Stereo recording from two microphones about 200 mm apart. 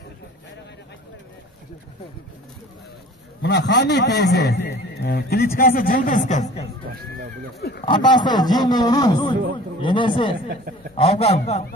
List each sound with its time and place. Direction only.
3.4 s a man's voice: 60° left (ahead or behind); by 6.7 s 35° left (ahead or behind)
7.8 s a man's voice: 20° left (ahead or behind)